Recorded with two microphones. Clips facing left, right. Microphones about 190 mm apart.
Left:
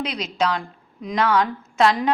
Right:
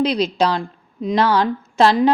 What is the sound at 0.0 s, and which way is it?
A woman's voice, 35° right (ahead or behind).